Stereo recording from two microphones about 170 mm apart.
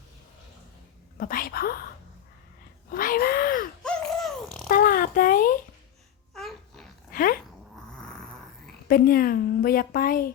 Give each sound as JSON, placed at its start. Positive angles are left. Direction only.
{"t": 1.2, "sound": "a woman's voice", "side_deg": 55}
{"t": 2.9, "sound": "speech", "side_deg": 60}
{"t": 3.8, "sound": "laughter", "side_deg": 5}
{"t": 4.7, "sound": "a sound", "side_deg": 55}
{"t": 6.3, "sound": "babbling", "side_deg": 0}
{"t": 7.1, "sound": "dog", "side_deg": 55}
{"t": 7.9, "sound": "a sound", "side_deg": 5}
{"t": 8.9, "sound": "a woman's voice", "side_deg": 60}